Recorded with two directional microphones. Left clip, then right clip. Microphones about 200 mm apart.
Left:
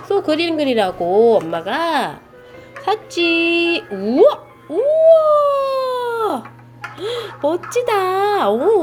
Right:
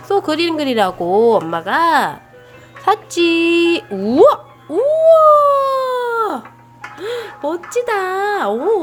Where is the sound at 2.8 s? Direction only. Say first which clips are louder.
Right 3 dB; 35° right (ahead or behind); by 6.4 s 20° right (ahead or behind).